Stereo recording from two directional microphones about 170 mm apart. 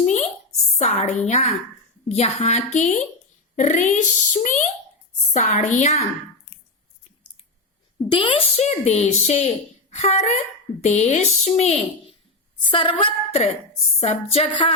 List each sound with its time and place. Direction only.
0.0 s a sound: 45° left (ahead or behind)
0.8 s speech: 40° left (ahead or behind)
8.1 s speech: 30° left (ahead or behind)